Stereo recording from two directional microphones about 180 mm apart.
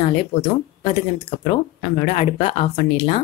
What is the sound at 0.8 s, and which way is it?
Speech, 30° left (ahead or behind).